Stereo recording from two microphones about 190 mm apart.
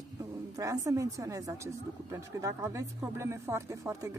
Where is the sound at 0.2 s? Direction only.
15° right (ahead or behind).